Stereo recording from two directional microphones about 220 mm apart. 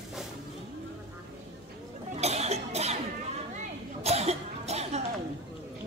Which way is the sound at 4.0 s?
30° right (ahead or behind).